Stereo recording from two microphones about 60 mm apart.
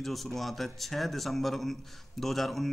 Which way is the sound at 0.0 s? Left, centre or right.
Centre.